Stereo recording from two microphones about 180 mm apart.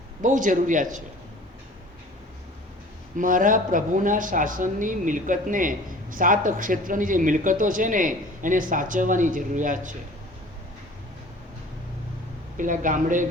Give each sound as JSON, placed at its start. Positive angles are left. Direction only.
{"t": 0.2, "sound": "speech", "side_deg": -45}
{"t": 3.2, "sound": "speech", "side_deg": -50}
{"t": 12.5, "sound": "speech", "side_deg": -45}